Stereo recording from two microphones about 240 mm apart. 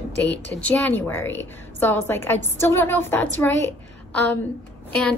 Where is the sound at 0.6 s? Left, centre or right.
Centre.